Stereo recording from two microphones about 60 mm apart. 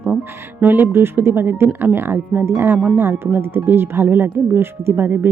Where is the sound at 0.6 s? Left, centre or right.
Right.